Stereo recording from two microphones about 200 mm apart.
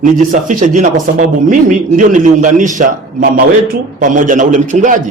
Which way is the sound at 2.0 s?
40° right (ahead or behind).